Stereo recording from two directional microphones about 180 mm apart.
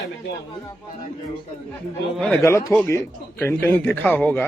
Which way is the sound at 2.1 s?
5° left (ahead or behind).